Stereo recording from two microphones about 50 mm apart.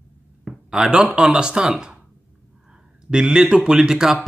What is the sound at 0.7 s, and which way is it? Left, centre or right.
Speech, centre.